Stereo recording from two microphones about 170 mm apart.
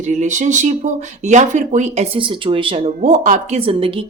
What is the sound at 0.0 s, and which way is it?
Speech, 45° right (ahead or behind).